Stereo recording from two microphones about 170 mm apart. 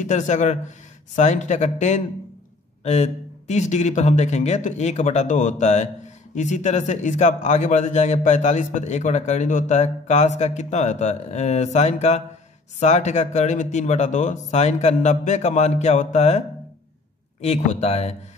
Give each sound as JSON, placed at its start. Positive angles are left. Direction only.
{"t": 0.0, "sound": "a man's voice", "side_deg": 45}